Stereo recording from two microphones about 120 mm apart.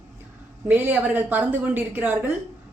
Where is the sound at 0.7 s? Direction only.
15° right (ahead or behind).